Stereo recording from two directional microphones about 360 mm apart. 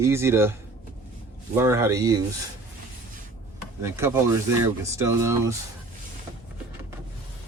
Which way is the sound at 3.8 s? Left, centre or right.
Centre.